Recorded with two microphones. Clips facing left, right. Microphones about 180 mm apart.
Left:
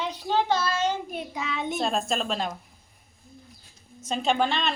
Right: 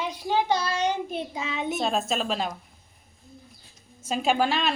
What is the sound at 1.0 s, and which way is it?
Speech, 25° right (ahead or behind).